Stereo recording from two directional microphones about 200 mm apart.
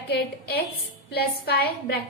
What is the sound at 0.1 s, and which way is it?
A woman's voice, 55° left (ahead or behind).